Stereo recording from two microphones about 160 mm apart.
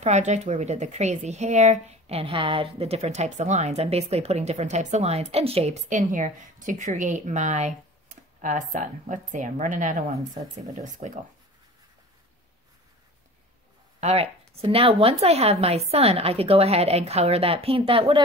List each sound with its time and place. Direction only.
0.0 s speech: 45° right (ahead or behind)
13.9 s speech: 45° right (ahead or behind)